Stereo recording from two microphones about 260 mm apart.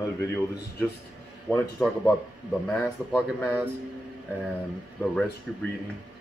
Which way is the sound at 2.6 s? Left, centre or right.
Centre.